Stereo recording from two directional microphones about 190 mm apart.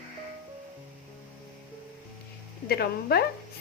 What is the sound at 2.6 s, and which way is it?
Speech, 55° left (ahead or behind).